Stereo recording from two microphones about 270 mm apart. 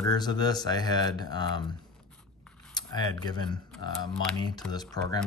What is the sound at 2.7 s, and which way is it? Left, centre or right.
Speech, centre.